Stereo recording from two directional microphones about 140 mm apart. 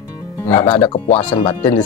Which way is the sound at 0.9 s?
40° left (ahead or behind).